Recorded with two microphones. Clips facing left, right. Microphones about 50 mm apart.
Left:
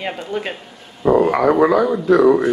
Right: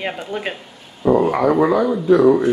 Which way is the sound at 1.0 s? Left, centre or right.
Left.